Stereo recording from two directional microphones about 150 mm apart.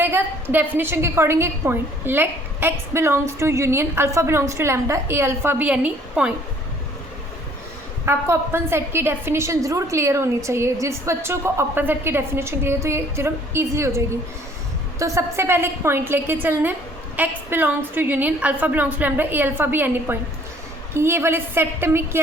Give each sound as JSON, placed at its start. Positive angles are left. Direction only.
{"t": 0.0, "sound": "a woman's voice", "side_deg": -15}
{"t": 8.0, "sound": "a woman's voice", "side_deg": -15}